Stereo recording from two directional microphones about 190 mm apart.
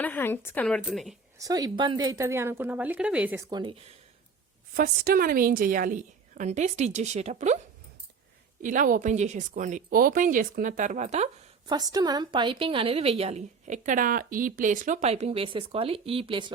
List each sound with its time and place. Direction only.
0.0 s a woman's voice: 10° left (ahead or behind)
1.4 s speech: 20° right (ahead or behind)
4.8 s a woman's voice: 50° right (ahead or behind)
8.6 s speech: 45° right (ahead or behind)
11.7 s a woman's voice: 20° right (ahead or behind)